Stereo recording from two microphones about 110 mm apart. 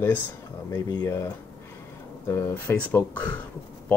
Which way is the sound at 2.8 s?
15° left (ahead or behind).